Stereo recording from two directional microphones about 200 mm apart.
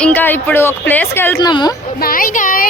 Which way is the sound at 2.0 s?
45° left (ahead or behind).